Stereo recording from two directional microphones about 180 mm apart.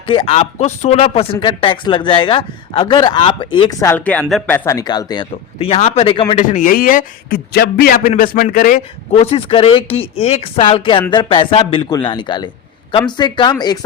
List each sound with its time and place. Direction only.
0.1 s speech: 30° left (ahead or behind); by 4.5 s 5° left (ahead or behind)
4.5 s a man's voice: 15° left (ahead or behind); by 8.8 s 50° left (ahead or behind)
9.1 s speech: 30° left (ahead or behind)